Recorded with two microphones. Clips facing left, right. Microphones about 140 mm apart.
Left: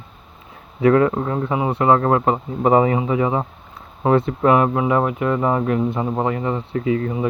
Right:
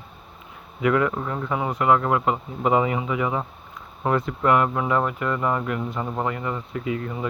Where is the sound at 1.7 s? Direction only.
30° left (ahead or behind).